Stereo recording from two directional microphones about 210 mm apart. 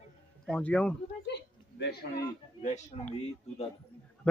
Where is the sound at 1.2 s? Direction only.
55° left (ahead or behind).